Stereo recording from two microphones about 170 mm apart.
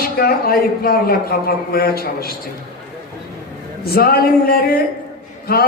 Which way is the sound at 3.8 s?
65° left (ahead or behind).